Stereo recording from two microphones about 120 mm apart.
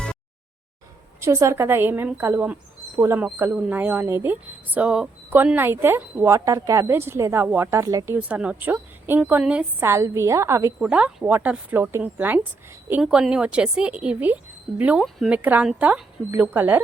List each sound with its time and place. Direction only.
1.2 s speech: 25° right (ahead or behind)
8.2 s a woman's voice: 10° right (ahead or behind)
9.8 s speech: 25° right (ahead or behind)
10.8 s a woman's voice: 10° right (ahead or behind)
13.0 s a woman's voice: 5° right (ahead or behind)